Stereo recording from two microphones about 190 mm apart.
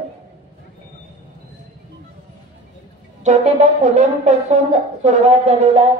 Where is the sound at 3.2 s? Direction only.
35° right (ahead or behind).